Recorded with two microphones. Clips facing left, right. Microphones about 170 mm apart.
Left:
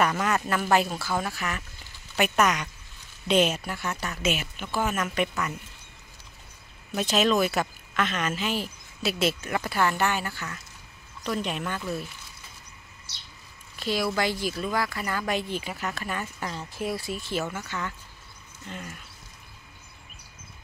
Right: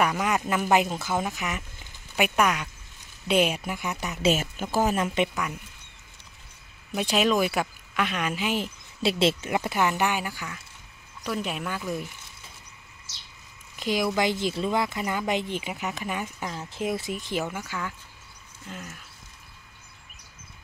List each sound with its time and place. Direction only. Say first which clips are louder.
0.0 s speech: even; 10° right (ahead or behind)
4.2 s speech: right 7 dB; 40° right (ahead or behind)
4.9 s speech: right 2 dB; 25° right (ahead or behind)
7.0 s speech: even; 10° right (ahead or behind)
9.0 s speech: right 3 dB; 25° right (ahead or behind)
13.7 s speech: right 2 dB; 15° right (ahead or behind)